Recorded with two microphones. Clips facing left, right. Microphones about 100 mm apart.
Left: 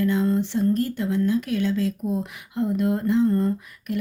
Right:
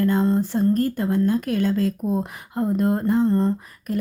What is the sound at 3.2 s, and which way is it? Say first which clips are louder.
Speech: right 2 dB; 30° right (ahead or behind).